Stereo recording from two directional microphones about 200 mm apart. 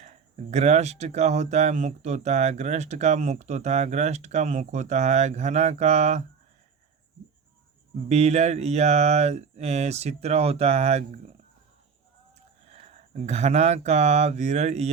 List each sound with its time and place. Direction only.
0.0 s speech: 35° right (ahead or behind)
8.1 s speech: 35° right (ahead or behind)
12.6 s speech: 35° right (ahead or behind)